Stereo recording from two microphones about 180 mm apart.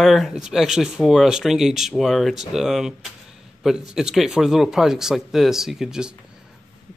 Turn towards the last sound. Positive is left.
turn(degrees=-5)  # may be behind; listen again after turning